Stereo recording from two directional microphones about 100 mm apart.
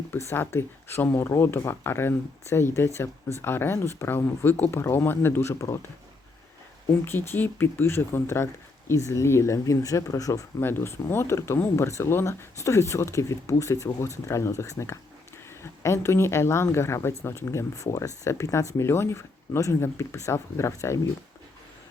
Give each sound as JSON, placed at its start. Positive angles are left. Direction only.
{"t": 0.1, "sound": "speech", "side_deg": 25}
{"t": 7.0, "sound": "speech", "side_deg": 25}
{"t": 10.6, "sound": "speech", "side_deg": 25}